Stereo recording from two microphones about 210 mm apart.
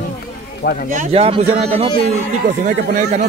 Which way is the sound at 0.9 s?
35° right (ahead or behind).